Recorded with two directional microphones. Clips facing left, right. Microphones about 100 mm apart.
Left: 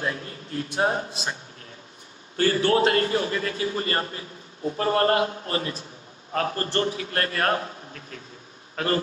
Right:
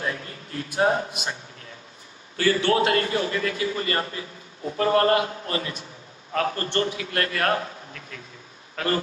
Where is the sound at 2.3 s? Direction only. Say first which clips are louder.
Even; 40° left (ahead or behind).